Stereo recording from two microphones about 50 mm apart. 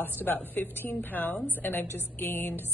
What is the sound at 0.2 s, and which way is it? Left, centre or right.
A woman's voice, left.